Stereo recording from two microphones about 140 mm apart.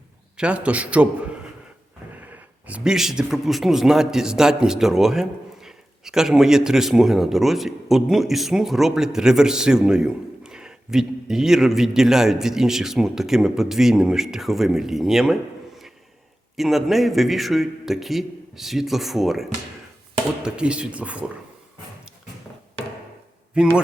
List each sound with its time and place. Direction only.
0.3 s a man's voice: 10° right (ahead or behind)
23.6 s speech: 5° right (ahead or behind)